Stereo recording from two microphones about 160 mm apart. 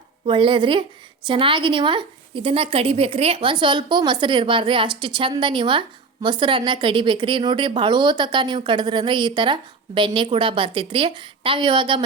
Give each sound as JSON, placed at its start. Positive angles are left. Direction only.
{"t": 0.3, "sound": "a woman's voice", "side_deg": -30}